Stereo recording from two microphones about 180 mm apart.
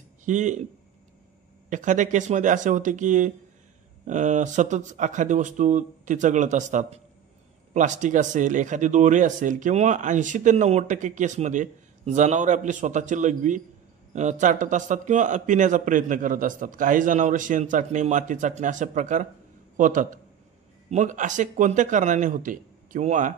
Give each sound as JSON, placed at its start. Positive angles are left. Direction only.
{"t": 0.2, "sound": "a man's voice", "side_deg": -45}
{"t": 1.7, "sound": "speech", "side_deg": -45}